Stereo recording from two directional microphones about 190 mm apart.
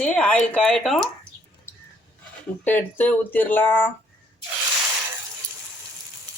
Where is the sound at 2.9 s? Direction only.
10° left (ahead or behind).